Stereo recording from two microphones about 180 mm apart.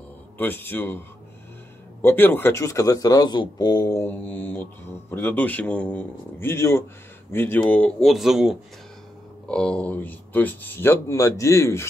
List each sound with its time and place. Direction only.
0.4 s speech: 10° left (ahead or behind)